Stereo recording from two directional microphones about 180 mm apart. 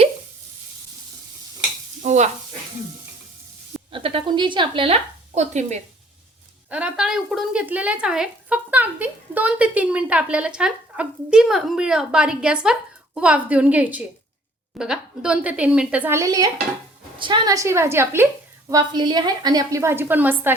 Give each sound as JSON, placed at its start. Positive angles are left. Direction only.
{"t": 2.0, "sound": "stir", "side_deg": -40}
{"t": 3.9, "sound": "a woman's voice", "side_deg": -30}
{"t": 6.7, "sound": "a woman's voice", "side_deg": -5}